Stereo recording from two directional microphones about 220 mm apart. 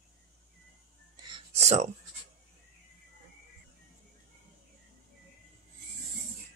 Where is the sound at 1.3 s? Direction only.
30° right (ahead or behind).